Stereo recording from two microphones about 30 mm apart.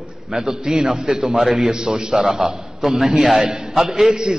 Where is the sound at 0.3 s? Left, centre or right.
Right.